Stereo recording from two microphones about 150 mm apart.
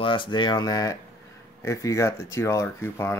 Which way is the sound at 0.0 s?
35° left (ahead or behind).